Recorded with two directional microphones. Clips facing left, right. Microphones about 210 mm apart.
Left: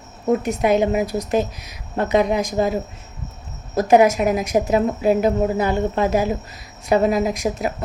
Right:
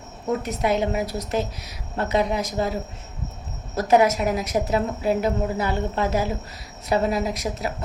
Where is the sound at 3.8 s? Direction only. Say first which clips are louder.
Left 4 dB; 15° left (ahead or behind).